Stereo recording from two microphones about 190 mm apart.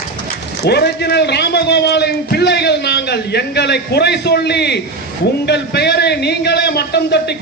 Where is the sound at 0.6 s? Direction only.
60° left (ahead or behind).